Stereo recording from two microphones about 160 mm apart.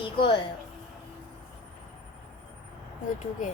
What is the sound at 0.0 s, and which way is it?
Speech, 30° left (ahead or behind).